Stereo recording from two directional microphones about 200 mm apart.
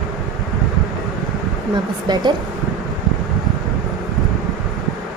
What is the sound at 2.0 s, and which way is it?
Speech, 20° right (ahead or behind).